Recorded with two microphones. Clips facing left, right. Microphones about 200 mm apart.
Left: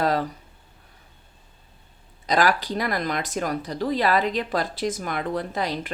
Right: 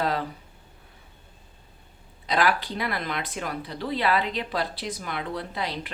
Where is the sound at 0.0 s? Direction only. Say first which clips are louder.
Left 4 dB; 40° left (ahead or behind).